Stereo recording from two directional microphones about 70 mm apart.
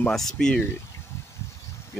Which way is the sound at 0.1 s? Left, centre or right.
Centre.